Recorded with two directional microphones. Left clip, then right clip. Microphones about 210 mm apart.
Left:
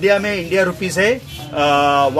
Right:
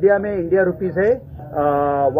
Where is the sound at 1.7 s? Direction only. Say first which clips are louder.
Left 4 dB; 5° left (ahead or behind).